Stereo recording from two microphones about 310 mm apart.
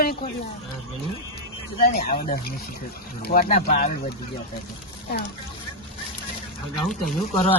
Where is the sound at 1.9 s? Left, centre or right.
Left.